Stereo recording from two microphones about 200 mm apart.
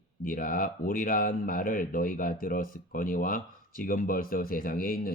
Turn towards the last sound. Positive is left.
turn(degrees=45)  # may be behind; listen again after turning